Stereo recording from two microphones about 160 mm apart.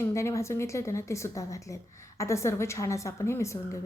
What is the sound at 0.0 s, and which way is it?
A woman's voice, 15° left (ahead or behind).